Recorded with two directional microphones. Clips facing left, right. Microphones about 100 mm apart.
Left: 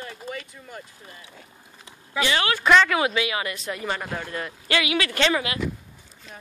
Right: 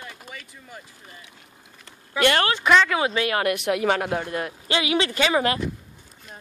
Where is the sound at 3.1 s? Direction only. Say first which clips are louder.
Right 4 dB; 50° right (ahead or behind); by 4.2 s 70° right (ahead or behind).